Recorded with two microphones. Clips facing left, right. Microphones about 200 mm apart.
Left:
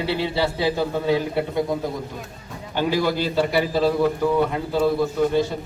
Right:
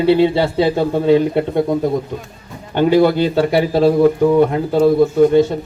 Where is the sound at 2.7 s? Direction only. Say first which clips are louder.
Right 9 dB; 55° right (ahead or behind).